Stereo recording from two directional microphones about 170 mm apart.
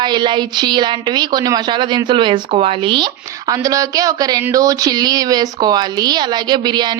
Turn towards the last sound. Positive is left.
turn(degrees=-25)  # may be behind; listen again after turning